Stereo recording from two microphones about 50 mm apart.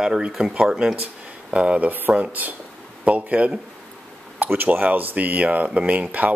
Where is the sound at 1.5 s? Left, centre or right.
Right.